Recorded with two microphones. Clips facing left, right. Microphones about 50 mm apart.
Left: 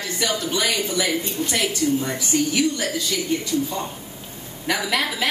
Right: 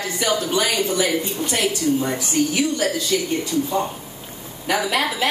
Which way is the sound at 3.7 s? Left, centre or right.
Centre.